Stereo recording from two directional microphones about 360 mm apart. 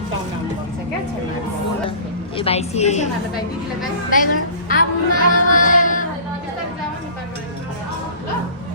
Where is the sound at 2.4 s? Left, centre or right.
Centre.